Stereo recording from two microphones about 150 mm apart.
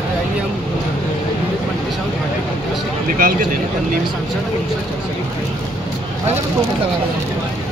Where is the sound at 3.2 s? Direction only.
70° right (ahead or behind).